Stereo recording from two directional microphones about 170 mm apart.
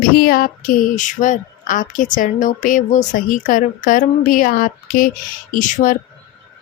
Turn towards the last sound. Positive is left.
turn(degrees=50)  # may be behind; listen again after turning